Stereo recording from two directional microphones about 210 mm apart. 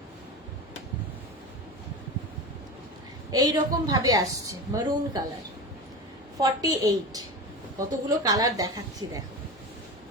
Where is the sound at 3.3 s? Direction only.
15° right (ahead or behind).